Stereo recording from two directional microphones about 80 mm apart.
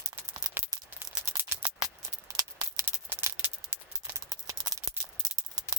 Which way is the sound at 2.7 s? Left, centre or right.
Right.